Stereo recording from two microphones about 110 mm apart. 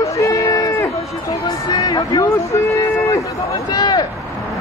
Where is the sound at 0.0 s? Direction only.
30° left (ahead or behind).